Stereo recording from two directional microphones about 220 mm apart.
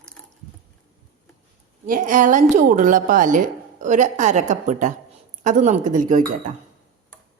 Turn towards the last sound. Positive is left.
turn(degrees=-35)  # may be behind; listen again after turning